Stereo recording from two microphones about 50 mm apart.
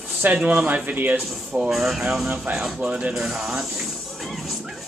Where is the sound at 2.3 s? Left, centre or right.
Right.